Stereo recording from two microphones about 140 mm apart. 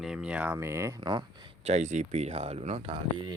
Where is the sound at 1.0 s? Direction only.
35° right (ahead or behind).